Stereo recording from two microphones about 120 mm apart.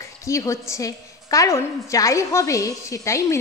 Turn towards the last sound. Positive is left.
turn(degrees=25)  # may be behind; listen again after turning